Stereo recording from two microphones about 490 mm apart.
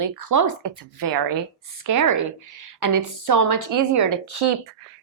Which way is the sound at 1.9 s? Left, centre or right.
Right.